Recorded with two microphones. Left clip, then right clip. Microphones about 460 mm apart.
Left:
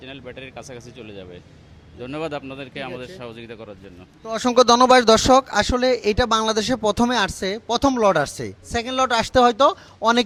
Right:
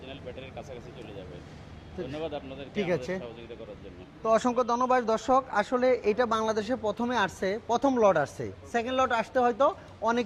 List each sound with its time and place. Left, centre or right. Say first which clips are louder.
0.0 s speech: left 5 dB; left
2.1 s speech: left 9 dB; left
3.2 s speech: left 5 dB; left
4.2 s a man's voice: left 7 dB; centre